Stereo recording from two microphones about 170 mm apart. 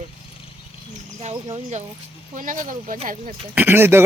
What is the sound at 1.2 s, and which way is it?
Speech, 40° right (ahead or behind).